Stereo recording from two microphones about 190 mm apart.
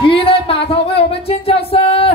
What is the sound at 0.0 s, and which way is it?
Music, 30° left (ahead or behind).